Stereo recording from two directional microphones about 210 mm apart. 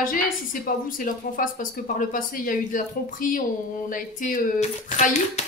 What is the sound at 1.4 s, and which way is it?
Speech, 40° left (ahead or behind).